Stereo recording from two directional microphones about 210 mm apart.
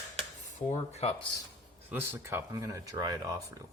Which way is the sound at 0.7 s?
30° left (ahead or behind).